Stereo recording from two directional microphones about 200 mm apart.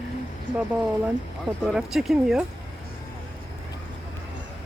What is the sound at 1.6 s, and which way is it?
Speech, centre (ahead or behind).